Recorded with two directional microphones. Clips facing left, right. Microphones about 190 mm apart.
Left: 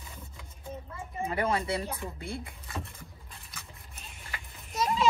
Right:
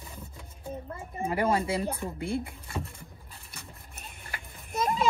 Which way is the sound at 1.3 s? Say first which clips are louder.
Right 3 dB; 30° right (ahead or behind).